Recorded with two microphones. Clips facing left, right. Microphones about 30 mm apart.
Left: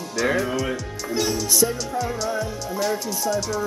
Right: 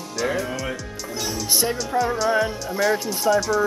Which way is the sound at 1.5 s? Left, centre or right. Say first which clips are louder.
Right 1 dB; right.